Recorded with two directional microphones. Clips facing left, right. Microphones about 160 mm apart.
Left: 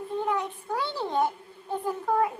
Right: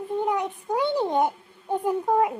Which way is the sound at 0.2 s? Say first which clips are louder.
Right 3 dB; 20° right (ahead or behind).